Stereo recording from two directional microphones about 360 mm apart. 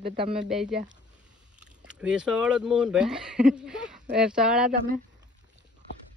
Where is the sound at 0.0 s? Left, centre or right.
Right.